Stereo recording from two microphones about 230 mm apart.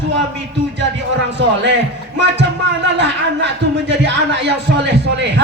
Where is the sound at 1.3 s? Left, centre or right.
Right.